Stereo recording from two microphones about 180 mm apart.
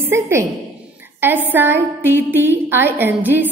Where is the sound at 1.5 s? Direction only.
10° right (ahead or behind).